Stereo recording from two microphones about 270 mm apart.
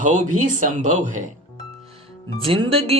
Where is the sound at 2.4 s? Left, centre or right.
Centre.